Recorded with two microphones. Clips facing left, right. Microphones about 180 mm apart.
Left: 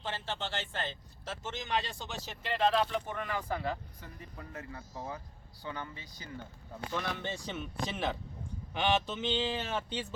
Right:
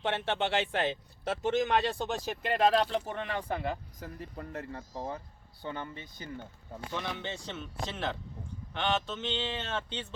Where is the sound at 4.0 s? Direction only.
55° right (ahead or behind).